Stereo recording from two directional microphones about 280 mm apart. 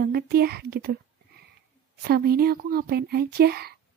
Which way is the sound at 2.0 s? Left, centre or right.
Right.